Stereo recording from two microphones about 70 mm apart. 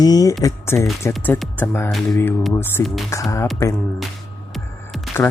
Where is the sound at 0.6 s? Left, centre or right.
Left.